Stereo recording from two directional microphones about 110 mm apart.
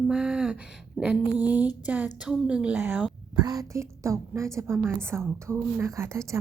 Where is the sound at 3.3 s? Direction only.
35° right (ahead or behind).